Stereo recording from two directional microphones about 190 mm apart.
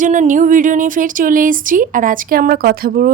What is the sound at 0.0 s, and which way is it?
Speech, 40° right (ahead or behind).